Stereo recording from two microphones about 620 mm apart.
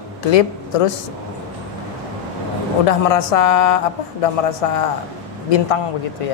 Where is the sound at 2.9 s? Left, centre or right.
Left.